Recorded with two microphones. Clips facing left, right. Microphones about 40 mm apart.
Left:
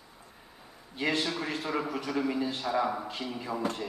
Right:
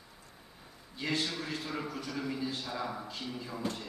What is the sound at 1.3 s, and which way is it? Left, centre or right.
A man's voice, left.